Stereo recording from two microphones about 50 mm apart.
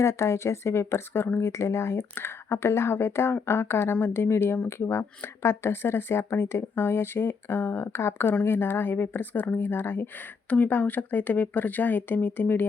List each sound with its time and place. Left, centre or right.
0.0 s speech: left
10.5 s speech: left